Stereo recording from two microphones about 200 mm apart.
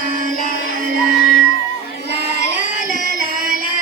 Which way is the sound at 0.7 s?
45° right (ahead or behind).